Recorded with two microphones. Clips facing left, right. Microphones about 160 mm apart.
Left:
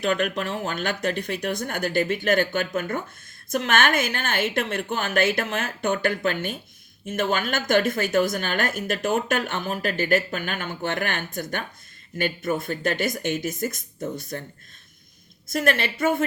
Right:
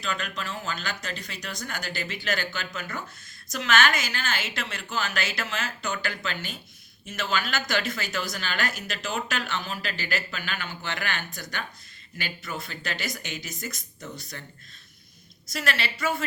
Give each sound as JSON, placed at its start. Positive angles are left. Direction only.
{"t": 0.0, "sound": "a woman's voice", "side_deg": 55}
{"t": 15.4, "sound": "a woman's voice", "side_deg": 55}